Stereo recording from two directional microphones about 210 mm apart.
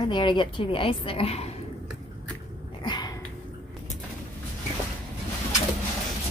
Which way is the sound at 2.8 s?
20° left (ahead or behind).